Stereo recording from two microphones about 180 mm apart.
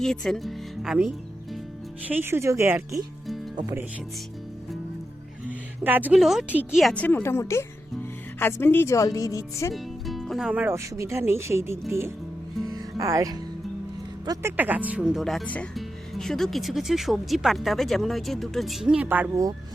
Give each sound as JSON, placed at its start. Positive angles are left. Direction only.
{"t": 0.0, "sound": "speech", "side_deg": 0}
{"t": 3.5, "sound": "speech", "side_deg": -25}
{"t": 5.8, "sound": "speech", "side_deg": -10}
{"t": 9.7, "sound": "speech", "side_deg": 0}
{"t": 12.6, "sound": "music", "side_deg": -20}
{"t": 14.3, "sound": "speech", "side_deg": -10}